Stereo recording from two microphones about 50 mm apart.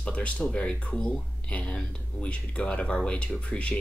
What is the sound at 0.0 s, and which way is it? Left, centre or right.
Speech, left.